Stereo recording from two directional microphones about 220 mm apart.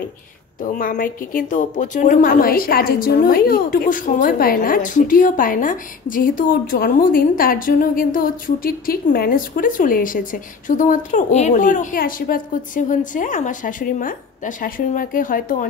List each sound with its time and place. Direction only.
0.6 s a woman's voice: 40° left (ahead or behind)